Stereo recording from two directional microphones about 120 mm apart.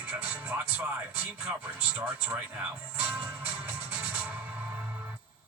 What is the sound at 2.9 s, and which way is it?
Music, 15° right (ahead or behind).